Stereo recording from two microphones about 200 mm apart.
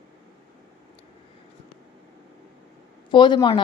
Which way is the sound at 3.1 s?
25° left (ahead or behind).